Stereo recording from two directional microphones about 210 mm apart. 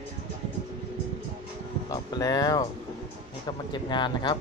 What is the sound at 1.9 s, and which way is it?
Speech, 15° left (ahead or behind).